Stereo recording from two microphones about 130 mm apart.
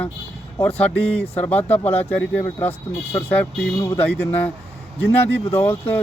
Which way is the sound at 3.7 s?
20° left (ahead or behind).